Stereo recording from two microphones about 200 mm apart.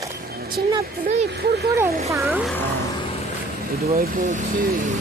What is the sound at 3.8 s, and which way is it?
Speech, 50° right (ahead or behind).